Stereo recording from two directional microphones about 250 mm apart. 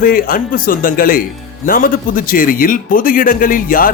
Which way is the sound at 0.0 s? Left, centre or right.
Left.